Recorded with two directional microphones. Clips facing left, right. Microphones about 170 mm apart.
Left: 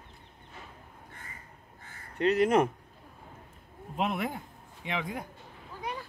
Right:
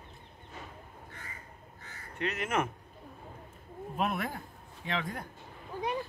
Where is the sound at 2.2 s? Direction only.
35° left (ahead or behind).